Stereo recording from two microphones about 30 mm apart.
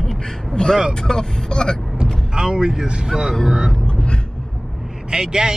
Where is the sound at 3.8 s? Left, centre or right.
Left.